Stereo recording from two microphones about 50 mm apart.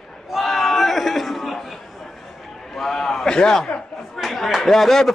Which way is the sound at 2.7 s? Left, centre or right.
Centre.